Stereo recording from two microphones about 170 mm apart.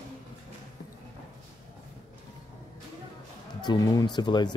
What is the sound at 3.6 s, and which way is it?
Speech, 25° left (ahead or behind).